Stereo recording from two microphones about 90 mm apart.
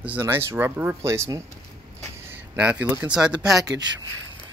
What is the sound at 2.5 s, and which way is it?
Speech, 15° right (ahead or behind).